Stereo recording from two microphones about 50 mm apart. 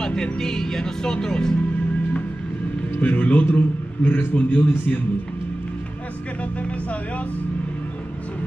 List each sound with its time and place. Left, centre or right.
0.0 s speech: centre
3.0 s a man's voice: left